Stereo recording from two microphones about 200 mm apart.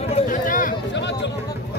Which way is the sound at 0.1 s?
40° left (ahead or behind).